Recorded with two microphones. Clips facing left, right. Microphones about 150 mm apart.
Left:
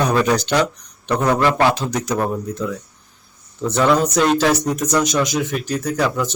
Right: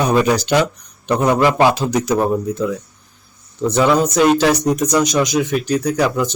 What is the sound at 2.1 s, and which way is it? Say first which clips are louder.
Speech: right 4 dB; 20° right (ahead or behind).